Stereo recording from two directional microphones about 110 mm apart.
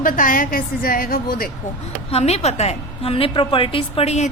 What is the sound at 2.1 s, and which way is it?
A woman's voice, 70° left (ahead or behind).